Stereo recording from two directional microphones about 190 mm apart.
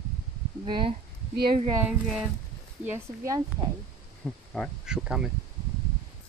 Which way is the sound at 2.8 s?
15° right (ahead or behind).